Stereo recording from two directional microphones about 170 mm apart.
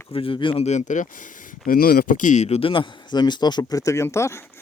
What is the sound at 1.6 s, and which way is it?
Speech, 60° left (ahead or behind).